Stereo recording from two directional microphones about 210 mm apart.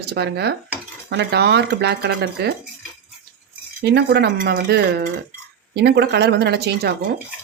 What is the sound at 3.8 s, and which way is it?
Speech, 50° right (ahead or behind).